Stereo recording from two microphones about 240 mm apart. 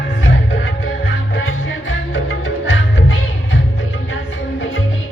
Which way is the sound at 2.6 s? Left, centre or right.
Left.